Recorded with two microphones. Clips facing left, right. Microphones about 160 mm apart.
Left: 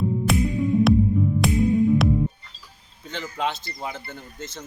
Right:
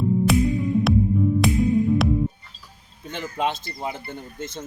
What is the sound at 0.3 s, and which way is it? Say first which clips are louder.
Music: right 1 dB; centre (ahead or behind).